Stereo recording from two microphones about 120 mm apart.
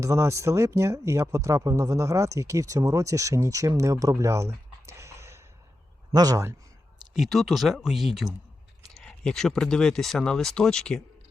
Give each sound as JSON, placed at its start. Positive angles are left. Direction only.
{"t": 0.0, "sound": "speech", "side_deg": -25}
{"t": 7.1, "sound": "speech", "side_deg": 0}